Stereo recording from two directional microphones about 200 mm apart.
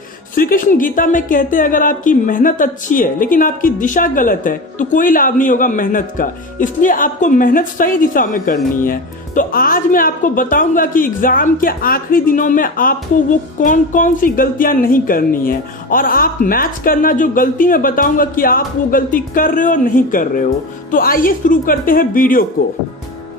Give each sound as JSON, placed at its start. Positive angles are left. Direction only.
{"t": 0.3, "sound": "speech", "side_deg": 45}